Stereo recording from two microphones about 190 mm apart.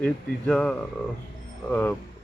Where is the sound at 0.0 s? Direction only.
5° left (ahead or behind).